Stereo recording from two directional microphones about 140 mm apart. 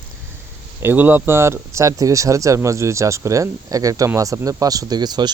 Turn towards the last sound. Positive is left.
turn(degrees=-30)  # may be behind; listen again after turning